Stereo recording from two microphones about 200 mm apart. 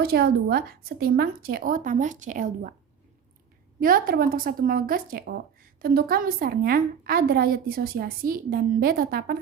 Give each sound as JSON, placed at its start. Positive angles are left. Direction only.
{"t": 0.0, "sound": "a woman's voice", "side_deg": -50}
{"t": 3.8, "sound": "a woman's voice", "side_deg": -45}